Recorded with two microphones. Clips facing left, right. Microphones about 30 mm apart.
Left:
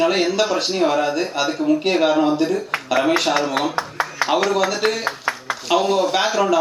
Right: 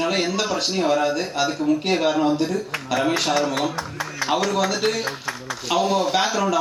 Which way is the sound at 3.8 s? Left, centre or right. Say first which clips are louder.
Left 5 dB; left.